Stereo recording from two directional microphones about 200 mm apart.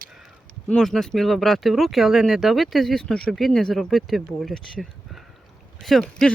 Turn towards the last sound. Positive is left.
turn(degrees=5)  # may be behind; listen again after turning